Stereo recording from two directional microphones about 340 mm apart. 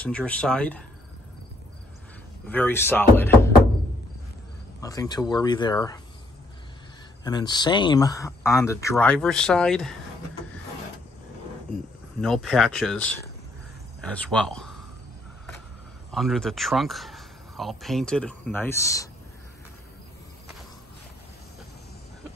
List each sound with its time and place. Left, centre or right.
0.0 s speech: centre
2.4 s speech: centre
4.8 s speech: centre
7.2 s speech: centre
12.2 s speech: centre
16.1 s speech: centre